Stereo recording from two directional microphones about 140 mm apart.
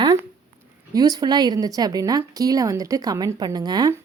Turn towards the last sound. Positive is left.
turn(degrees=-30)  # may be behind; listen again after turning